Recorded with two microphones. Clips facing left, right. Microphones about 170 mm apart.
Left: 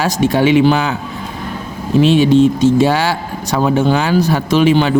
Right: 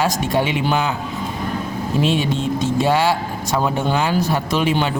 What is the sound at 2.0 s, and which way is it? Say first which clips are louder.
Speech: left 12 dB; 90° left.